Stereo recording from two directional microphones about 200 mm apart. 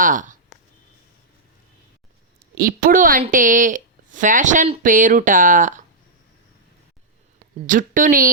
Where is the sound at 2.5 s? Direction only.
45° right (ahead or behind).